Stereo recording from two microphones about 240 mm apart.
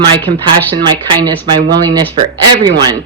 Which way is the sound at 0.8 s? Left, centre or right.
Centre.